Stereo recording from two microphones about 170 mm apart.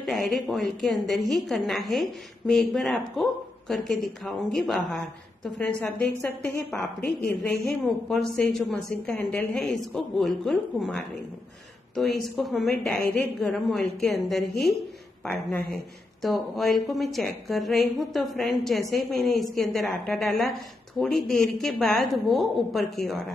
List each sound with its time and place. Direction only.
0.0 s a woman's voice: centre (ahead or behind)
7.1 s a woman's voice: 65° left (ahead or behind)
7.6 s a woman's voice: centre (ahead or behind)
16.2 s a woman's voice: centre (ahead or behind)